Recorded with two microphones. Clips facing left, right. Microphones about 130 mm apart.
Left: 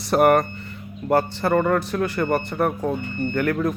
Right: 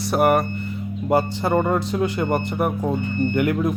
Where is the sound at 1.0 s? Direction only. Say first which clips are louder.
Even; 15° right (ahead or behind).